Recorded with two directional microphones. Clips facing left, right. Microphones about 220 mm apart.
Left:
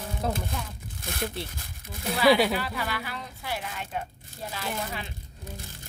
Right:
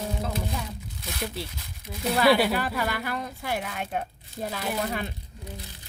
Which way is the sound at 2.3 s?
Centre (ahead or behind).